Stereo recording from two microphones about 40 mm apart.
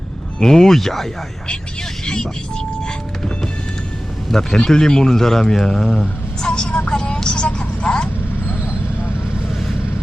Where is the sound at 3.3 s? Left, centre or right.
Left.